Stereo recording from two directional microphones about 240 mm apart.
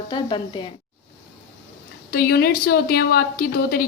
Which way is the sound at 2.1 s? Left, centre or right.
Left.